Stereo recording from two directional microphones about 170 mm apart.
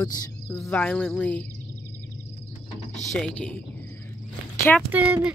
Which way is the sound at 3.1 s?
5° left (ahead or behind).